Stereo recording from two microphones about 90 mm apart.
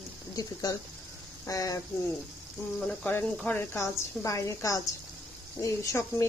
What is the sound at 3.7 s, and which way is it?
Speech, 35° left (ahead or behind).